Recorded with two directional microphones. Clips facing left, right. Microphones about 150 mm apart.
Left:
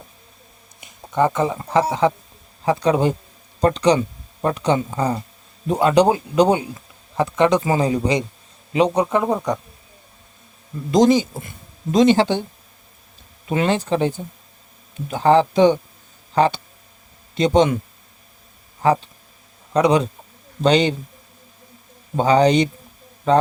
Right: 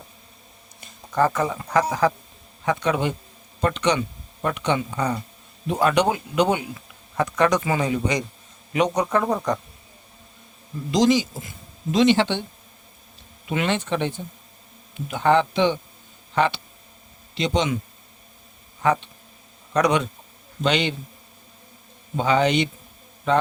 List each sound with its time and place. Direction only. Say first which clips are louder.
0.8 s a man's voice: left 2 dB; 15° left (ahead or behind)
10.9 s speech: left 4 dB; 50° left (ahead or behind)
11.9 s speech: left 4 dB; 40° left (ahead or behind)
13.5 s speech: left 4 dB; 35° left (ahead or behind)
17.3 s speech: left 7 dB; 50° left (ahead or behind)
18.8 s speech: left 4 dB; 30° left (ahead or behind)
22.2 s speech: left 5 dB; 35° left (ahead or behind)